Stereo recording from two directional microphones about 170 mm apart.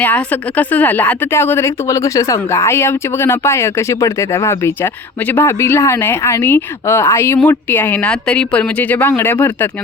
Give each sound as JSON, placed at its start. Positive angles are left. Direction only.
{"t": 0.0, "sound": "speech", "side_deg": 10}